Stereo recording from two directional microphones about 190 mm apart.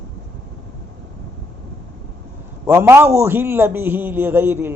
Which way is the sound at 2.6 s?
15° right (ahead or behind).